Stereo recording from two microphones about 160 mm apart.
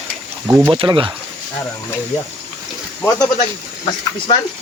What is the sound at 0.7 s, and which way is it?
Speech, 35° right (ahead or behind).